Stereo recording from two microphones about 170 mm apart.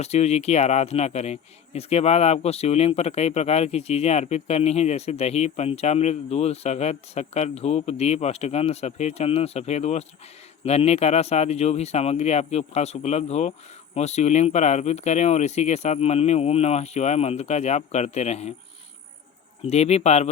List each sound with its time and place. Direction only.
0.0 s speech: 40° left (ahead or behind)
19.6 s speech: 40° left (ahead or behind)